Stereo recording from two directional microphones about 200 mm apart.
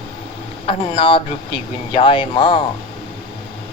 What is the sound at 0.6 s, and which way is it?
Speech, 25° left (ahead or behind).